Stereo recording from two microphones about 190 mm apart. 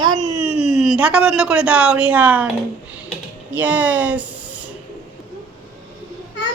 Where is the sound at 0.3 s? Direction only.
10° right (ahead or behind).